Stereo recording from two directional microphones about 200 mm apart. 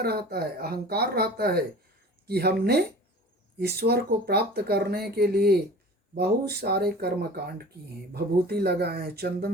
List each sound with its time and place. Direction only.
0.0 s speech: 50° right (ahead or behind)